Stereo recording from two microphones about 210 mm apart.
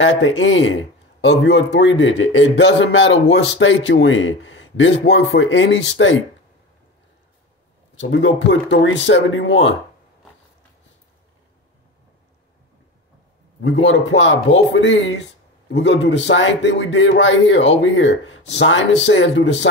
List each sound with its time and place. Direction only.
0.0 s a man's voice: 65° left (ahead or behind)
8.0 s a man's voice: 60° left (ahead or behind)
13.6 s a man's voice: 65° left (ahead or behind)